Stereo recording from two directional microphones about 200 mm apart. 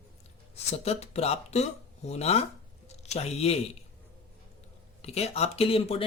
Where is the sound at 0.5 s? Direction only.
30° left (ahead or behind).